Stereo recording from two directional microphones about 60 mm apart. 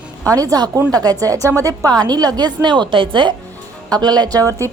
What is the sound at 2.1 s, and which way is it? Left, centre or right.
Speech, right.